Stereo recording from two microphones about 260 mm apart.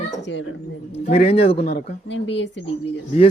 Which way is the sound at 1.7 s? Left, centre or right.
Left.